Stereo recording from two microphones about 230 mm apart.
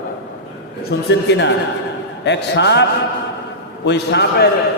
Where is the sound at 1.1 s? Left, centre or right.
Left.